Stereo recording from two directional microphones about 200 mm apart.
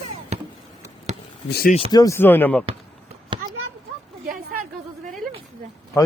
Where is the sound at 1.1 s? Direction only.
35° right (ahead or behind).